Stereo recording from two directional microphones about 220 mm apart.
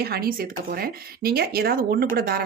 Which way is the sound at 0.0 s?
45° right (ahead or behind).